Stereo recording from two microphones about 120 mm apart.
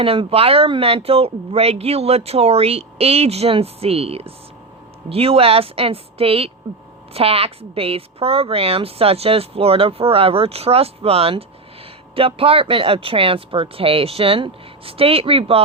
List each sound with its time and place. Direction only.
0.0 s a woman's voice: 50° right (ahead or behind)